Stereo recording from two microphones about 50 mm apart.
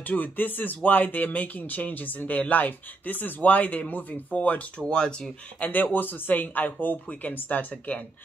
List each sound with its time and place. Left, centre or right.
0.0 s speech: left
4.8 s speech: centre
5.6 s speech: left